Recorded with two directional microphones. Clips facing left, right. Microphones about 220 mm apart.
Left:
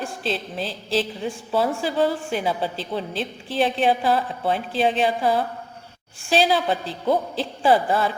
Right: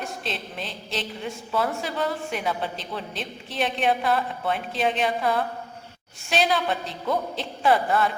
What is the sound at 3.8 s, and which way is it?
A woman's voice, 30° left (ahead or behind).